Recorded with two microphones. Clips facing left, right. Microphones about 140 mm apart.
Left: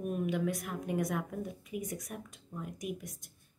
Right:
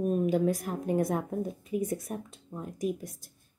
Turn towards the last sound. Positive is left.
turn(degrees=-30)  # may be behind; listen again after turning